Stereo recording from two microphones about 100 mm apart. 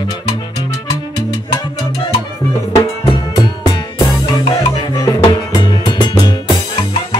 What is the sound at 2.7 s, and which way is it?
Music, 40° left (ahead or behind).